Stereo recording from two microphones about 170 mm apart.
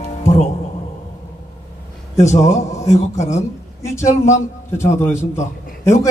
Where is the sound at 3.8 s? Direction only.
15° left (ahead or behind).